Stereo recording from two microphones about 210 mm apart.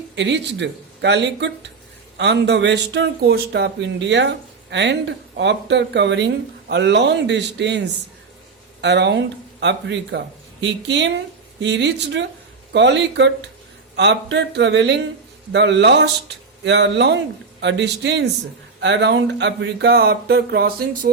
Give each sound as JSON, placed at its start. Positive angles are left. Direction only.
{"t": 0.2, "sound": "speech", "side_deg": -55}